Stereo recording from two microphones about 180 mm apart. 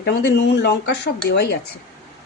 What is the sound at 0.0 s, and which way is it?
Speech, 75° left (ahead or behind).